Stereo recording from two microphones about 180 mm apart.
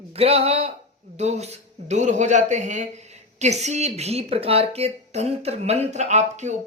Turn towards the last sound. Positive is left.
turn(degrees=-40)  # may be behind; listen again after turning